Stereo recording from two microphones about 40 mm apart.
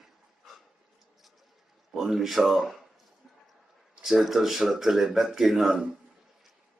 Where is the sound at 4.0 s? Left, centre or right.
Centre.